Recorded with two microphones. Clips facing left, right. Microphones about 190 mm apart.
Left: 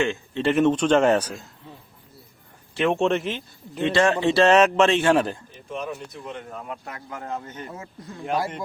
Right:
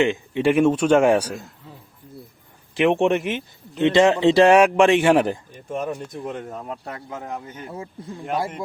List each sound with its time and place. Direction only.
0.0 s a man's voice: 15° right (ahead or behind)
2.7 s a man's voice: 15° right (ahead or behind)
5.6 s speech: 45° right (ahead or behind)
6.7 s a man's voice: 30° right (ahead or behind); by 7.7 s 10° right (ahead or behind)